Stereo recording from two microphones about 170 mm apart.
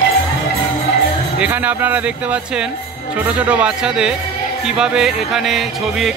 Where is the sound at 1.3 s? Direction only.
10° right (ahead or behind).